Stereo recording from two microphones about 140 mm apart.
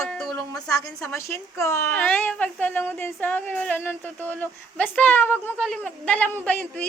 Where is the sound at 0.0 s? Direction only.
5° left (ahead or behind).